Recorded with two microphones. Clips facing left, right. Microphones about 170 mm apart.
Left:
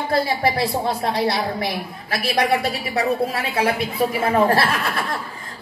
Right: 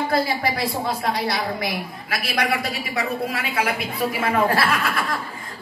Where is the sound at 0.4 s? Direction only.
30° left (ahead or behind).